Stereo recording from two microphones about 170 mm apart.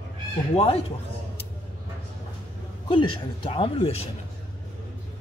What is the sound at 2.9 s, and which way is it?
Speech, 30° left (ahead or behind).